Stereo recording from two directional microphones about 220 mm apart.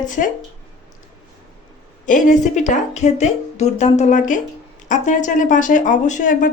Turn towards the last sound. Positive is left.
turn(degrees=35)  # may be behind; listen again after turning